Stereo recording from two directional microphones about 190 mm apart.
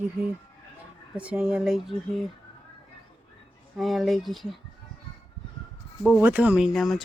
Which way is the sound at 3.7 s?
Centre (ahead or behind).